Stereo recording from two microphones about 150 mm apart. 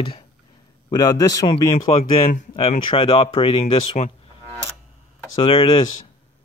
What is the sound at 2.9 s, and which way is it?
Speech, 35° left (ahead or behind).